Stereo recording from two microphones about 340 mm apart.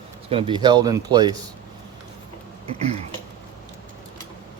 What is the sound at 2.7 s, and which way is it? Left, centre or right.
Speech, centre.